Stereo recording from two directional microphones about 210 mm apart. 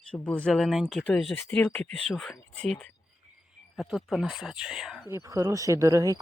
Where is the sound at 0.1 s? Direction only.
5° left (ahead or behind).